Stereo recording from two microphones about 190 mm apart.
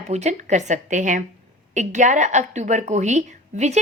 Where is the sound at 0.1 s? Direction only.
35° right (ahead or behind).